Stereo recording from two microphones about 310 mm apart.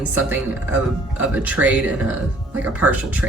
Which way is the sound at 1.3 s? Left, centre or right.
Centre.